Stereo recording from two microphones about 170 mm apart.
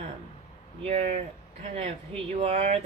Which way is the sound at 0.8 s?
40° right (ahead or behind).